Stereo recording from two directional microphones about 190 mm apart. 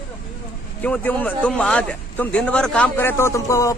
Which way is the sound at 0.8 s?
10° left (ahead or behind).